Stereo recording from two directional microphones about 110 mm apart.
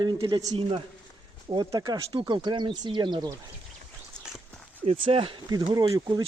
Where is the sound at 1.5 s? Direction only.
35° right (ahead or behind).